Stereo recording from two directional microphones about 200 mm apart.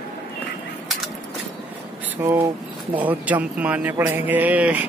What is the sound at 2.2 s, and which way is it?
Speech, 10° right (ahead or behind).